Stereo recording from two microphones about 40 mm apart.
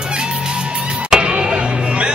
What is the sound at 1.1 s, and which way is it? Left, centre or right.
Music, right.